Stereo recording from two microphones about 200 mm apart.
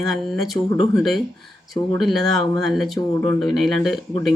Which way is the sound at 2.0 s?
Centre (ahead or behind).